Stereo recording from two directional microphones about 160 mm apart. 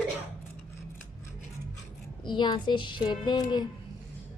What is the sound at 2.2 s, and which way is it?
Speech, 30° left (ahead or behind).